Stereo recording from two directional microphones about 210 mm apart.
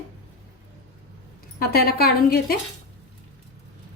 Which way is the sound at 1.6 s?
45° left (ahead or behind).